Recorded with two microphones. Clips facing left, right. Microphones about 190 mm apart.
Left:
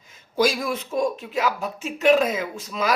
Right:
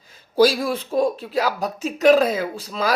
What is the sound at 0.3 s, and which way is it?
Speech, 35° right (ahead or behind).